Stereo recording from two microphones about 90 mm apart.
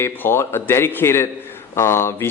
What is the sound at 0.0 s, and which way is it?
Speech, 30° left (ahead or behind).